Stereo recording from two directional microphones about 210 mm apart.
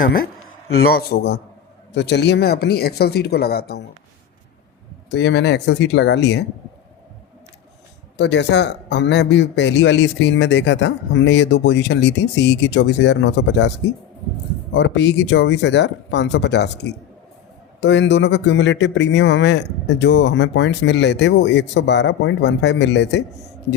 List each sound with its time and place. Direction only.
0.0 s speech: 45° left (ahead or behind)
5.1 s a man's voice: 55° left (ahead or behind)
8.1 s a man's voice: 55° left (ahead or behind)